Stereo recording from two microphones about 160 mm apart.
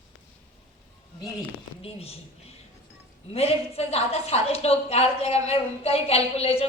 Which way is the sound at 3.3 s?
40° left (ahead or behind).